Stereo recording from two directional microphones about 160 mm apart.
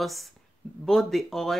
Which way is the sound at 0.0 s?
Centre (ahead or behind).